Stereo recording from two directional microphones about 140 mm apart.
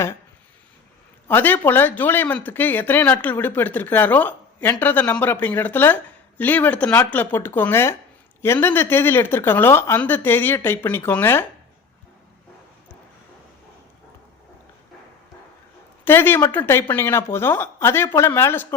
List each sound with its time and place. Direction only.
1.3 s speech: 15° left (ahead or behind)
16.0 s speech: 15° left (ahead or behind)